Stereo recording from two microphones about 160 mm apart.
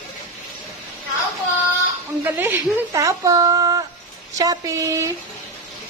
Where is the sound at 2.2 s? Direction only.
10° right (ahead or behind).